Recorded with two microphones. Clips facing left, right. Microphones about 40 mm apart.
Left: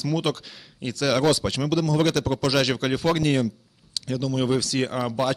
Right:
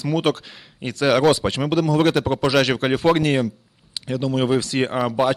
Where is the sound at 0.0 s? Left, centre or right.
Centre.